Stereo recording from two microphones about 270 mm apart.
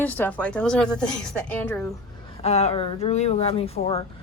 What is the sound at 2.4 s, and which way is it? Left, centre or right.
Speech, left.